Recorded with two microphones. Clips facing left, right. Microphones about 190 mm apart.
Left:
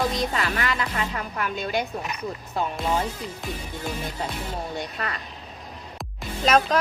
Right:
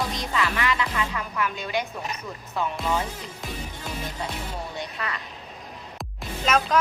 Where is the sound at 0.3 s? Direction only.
40° left (ahead or behind).